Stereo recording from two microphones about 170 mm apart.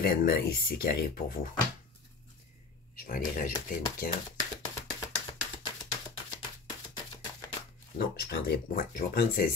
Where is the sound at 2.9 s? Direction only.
55° left (ahead or behind).